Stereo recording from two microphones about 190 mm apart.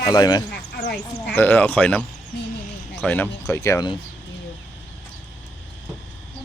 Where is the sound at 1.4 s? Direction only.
10° left (ahead or behind).